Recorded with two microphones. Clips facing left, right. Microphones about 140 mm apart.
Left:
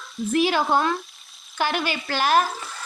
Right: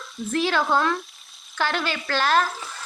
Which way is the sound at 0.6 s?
25° left (ahead or behind).